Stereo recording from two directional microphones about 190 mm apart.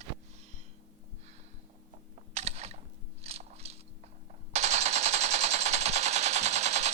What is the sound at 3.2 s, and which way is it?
Biting, 35° right (ahead or behind).